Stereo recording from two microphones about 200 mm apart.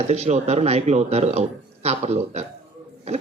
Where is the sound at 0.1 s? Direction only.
35° right (ahead or behind).